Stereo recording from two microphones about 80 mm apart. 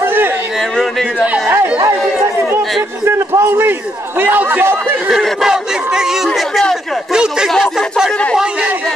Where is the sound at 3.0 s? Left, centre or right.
Right.